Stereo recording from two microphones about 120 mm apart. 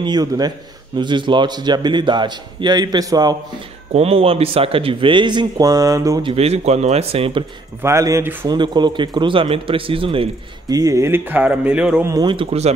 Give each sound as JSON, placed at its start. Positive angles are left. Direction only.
{"t": 0.0, "sound": "a man's voice", "side_deg": -35}
{"t": 3.9, "sound": "speech", "side_deg": -55}
{"t": 6.2, "sound": "speech", "side_deg": -60}
{"t": 7.8, "sound": "speech", "side_deg": -25}
{"t": 8.5, "sound": "speech", "side_deg": -40}
{"t": 10.7, "sound": "speech", "side_deg": -30}
{"t": 12.1, "sound": "a man's voice", "side_deg": -30}
{"t": 12.4, "sound": "speech", "side_deg": -60}